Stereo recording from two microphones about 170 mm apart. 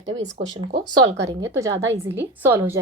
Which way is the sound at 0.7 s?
90° right.